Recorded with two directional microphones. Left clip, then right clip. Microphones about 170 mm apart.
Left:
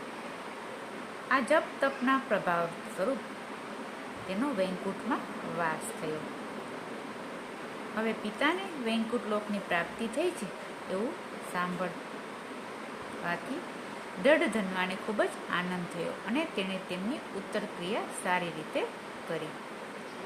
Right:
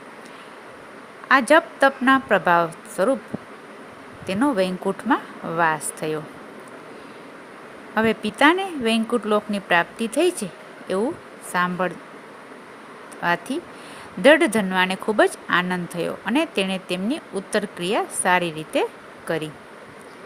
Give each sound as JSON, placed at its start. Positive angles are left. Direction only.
{"t": 1.3, "sound": "speech", "side_deg": -70}
{"t": 4.3, "sound": "speech", "side_deg": -75}
{"t": 7.9, "sound": "speech", "side_deg": -70}
{"t": 13.2, "sound": "speech", "side_deg": -75}